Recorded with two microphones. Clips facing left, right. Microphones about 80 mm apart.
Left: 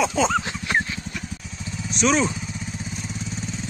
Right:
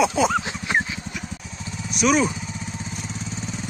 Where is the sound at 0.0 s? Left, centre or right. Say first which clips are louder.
Right 1 dB; centre.